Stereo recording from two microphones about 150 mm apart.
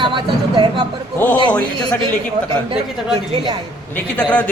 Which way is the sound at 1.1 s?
15° left (ahead or behind).